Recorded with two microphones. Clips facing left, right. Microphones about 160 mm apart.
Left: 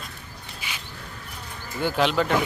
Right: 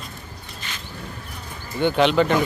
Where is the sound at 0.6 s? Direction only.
10° left (ahead or behind).